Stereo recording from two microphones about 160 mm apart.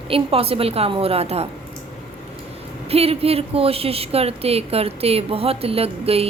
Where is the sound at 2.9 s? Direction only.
40° right (ahead or behind).